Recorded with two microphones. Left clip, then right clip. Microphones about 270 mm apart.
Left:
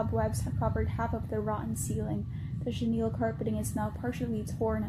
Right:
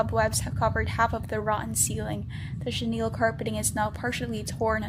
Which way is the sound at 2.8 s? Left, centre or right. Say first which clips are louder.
Right 5 dB; right.